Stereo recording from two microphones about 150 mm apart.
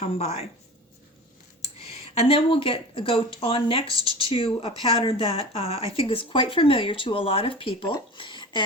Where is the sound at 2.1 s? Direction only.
40° left (ahead or behind).